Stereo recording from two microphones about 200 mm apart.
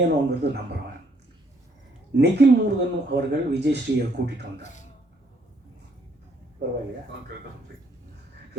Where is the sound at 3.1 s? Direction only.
55° right (ahead or behind).